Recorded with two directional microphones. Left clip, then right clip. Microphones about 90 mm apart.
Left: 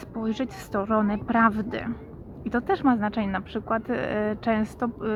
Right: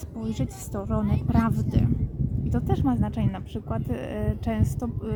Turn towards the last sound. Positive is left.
turn(degrees=-30)  # may be behind; listen again after turning